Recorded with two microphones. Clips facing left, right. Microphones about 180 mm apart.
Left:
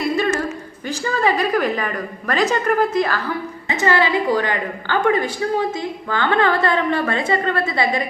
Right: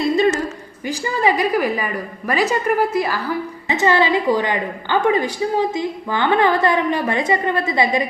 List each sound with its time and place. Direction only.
0.0 s a sound: 20° right (ahead or behind)
0.9 s a woman's voice: 15° right (ahead or behind)
3.7 s a woman's voice: 20° right (ahead or behind)